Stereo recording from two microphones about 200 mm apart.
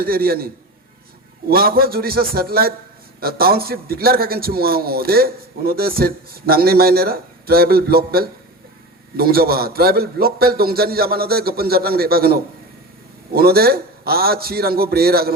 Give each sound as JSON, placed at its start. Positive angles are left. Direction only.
{"t": 0.0, "sound": "a man's voice", "side_deg": -50}